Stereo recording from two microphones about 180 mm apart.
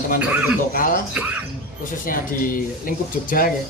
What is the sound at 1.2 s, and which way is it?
Speech, 5° right (ahead or behind).